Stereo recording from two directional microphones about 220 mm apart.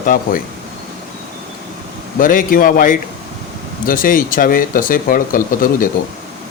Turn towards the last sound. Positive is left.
turn(degrees=40)  # may be behind; listen again after turning